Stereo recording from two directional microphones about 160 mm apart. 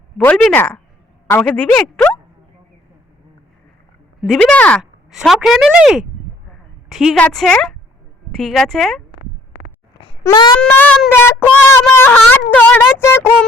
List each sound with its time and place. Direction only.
0.2 s speech: 10° left (ahead or behind)
4.3 s speech: 5° left (ahead or behind)
10.2 s a sound: 25° left (ahead or behind)
10.6 s speech: 10° left (ahead or behind)